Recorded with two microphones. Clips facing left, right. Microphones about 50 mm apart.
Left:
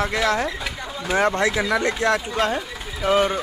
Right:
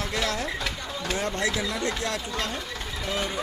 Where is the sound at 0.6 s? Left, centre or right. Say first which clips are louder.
Left 3 dB; centre.